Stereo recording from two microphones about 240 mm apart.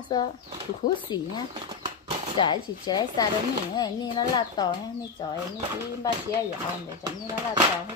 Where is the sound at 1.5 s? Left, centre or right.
Right.